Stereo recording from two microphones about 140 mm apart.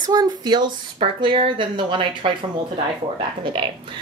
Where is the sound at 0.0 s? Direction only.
30° right (ahead or behind).